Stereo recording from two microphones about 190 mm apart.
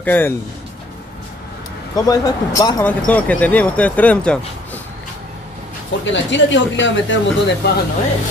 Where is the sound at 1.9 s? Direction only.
20° left (ahead or behind).